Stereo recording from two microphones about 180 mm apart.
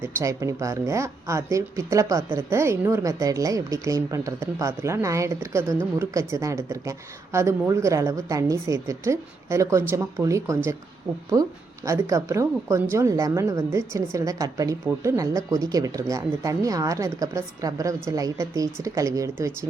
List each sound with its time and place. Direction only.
0.0 s speech: 15° right (ahead or behind)